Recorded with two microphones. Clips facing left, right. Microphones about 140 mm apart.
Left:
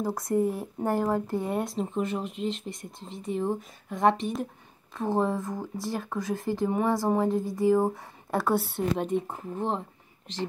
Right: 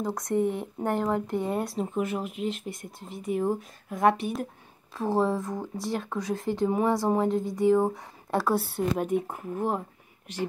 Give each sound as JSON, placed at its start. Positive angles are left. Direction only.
{"t": 0.0, "sound": "speech", "side_deg": 5}
{"t": 1.2, "sound": "speech", "side_deg": -20}
{"t": 1.5, "sound": "speech", "side_deg": 0}